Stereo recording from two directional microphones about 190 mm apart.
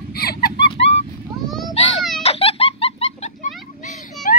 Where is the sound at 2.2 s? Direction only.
30° left (ahead or behind).